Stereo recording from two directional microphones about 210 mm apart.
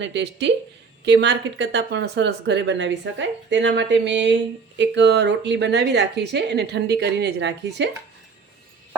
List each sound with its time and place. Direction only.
0.0 s a woman's voice: 55° right (ahead or behind)